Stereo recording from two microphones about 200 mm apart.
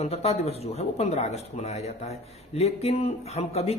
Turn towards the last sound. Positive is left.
turn(degrees=30)  # may be behind; listen again after turning